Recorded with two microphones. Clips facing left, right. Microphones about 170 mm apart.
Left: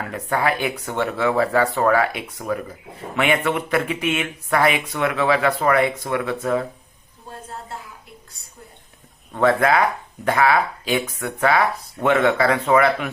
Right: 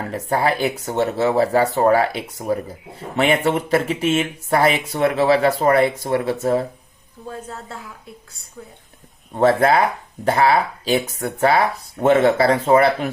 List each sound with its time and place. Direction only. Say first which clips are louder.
0.0 s speech: right 2 dB; 35° right (ahead or behind)
9.3 s speech: right 2 dB; 30° right (ahead or behind)